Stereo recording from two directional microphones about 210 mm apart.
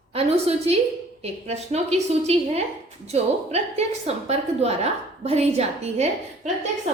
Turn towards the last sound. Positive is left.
turn(degrees=-35)  # may be behind; listen again after turning